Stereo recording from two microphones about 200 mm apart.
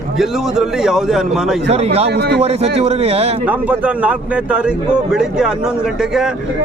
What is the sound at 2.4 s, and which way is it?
Speech, 30° right (ahead or behind).